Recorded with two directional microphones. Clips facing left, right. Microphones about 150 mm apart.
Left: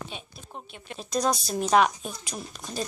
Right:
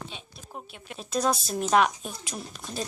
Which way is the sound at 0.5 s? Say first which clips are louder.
Even; centre (ahead or behind).